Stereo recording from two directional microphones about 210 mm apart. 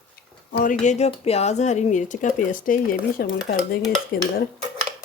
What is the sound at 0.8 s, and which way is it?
Speech, 30° left (ahead or behind).